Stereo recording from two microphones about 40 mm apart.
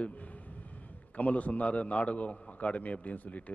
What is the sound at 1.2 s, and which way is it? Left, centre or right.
A man's voice, left.